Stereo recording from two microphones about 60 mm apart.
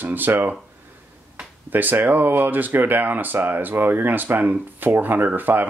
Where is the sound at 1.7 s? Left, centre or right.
Right.